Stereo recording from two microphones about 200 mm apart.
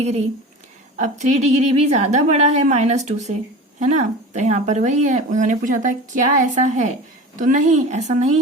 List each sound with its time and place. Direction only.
0.9 s speech: 35° right (ahead or behind)